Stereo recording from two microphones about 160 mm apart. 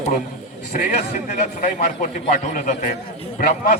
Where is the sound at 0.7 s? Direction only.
55° left (ahead or behind).